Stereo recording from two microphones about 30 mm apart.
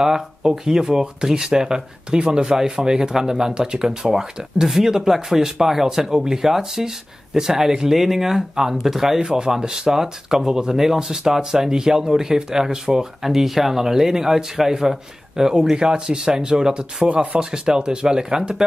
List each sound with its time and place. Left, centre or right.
0.0 s speech: centre
9.2 s speech: right
15.7 s speech: right
17.1 s speech: right
17.4 s speech: right